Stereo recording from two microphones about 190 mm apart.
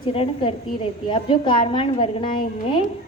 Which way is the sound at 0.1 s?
30° left (ahead or behind).